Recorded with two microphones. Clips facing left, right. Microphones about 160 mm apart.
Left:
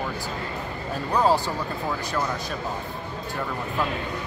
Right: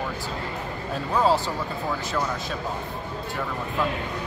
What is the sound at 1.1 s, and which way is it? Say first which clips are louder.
Speech: even; centre (ahead or behind).